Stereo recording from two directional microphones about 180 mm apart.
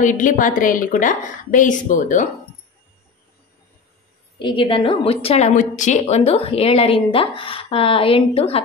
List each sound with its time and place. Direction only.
0.0 s a woman's voice: 45° left (ahead or behind)
4.4 s a woman's voice: 25° left (ahead or behind)